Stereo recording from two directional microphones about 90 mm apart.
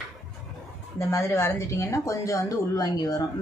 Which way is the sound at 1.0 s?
30° left (ahead or behind).